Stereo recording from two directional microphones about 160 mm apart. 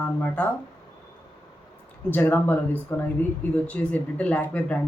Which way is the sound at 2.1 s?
10° left (ahead or behind).